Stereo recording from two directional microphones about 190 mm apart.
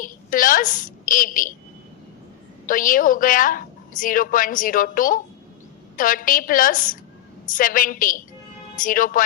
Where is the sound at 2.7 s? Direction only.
45° left (ahead or behind).